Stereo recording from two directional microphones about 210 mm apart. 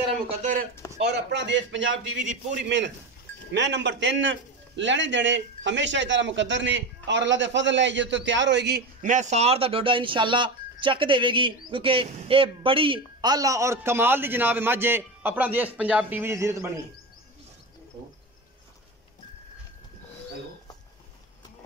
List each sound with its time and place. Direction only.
0.4 s a sound: 35° right (ahead or behind)
1.0 s a man's voice: 55° right (ahead or behind)
3.5 s a man's voice: 60° right (ahead or behind)
9.0 s speech: 35° right (ahead or behind); by 16.8 s 15° right (ahead or behind)